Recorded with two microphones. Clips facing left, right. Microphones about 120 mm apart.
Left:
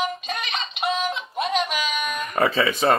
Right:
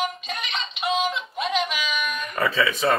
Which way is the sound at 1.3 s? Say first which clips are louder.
Left 3 dB; 45° left (ahead or behind).